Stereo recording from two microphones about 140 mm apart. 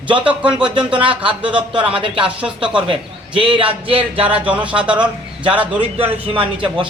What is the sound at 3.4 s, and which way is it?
Speech, 35° right (ahead or behind).